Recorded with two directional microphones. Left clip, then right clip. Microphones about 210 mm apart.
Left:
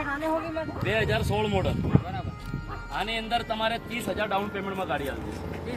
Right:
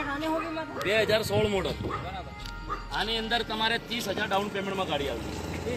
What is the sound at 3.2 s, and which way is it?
Speech, 25° left (ahead or behind).